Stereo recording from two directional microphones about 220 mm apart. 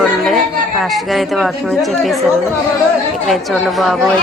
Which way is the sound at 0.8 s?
Centre (ahead or behind).